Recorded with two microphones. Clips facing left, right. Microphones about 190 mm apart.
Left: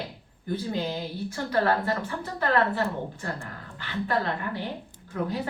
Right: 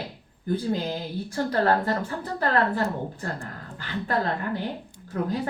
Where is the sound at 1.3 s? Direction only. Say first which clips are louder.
Right 2 dB; 45° right (ahead or behind).